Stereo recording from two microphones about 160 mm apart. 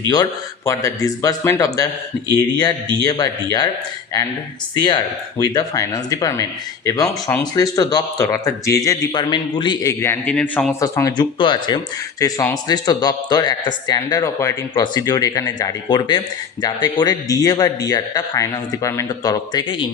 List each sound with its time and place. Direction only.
0.1 s speech: 20° left (ahead or behind)
4.8 s speech: 25° left (ahead or behind)
10.0 s a man's voice: 15° left (ahead or behind)
10.8 s speech: 20° left (ahead or behind)